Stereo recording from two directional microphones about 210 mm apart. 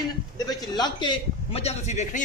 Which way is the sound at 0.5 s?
20° left (ahead or behind).